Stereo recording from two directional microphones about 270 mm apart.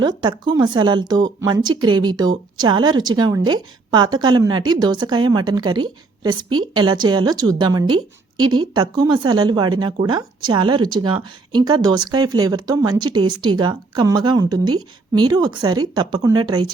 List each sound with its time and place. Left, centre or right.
0.0 s speech: centre